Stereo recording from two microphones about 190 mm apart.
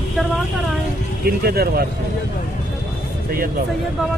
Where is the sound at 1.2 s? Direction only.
55° right (ahead or behind).